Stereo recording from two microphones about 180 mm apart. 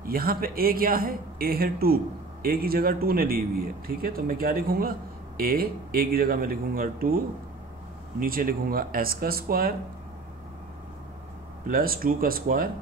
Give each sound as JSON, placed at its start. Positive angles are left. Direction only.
{"t": 0.0, "sound": "speech", "side_deg": -55}
{"t": 8.2, "sound": "speech", "side_deg": -50}
{"t": 11.6, "sound": "speech", "side_deg": -55}